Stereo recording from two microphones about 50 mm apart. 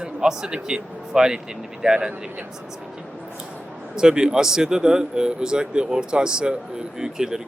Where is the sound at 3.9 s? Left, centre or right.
Centre.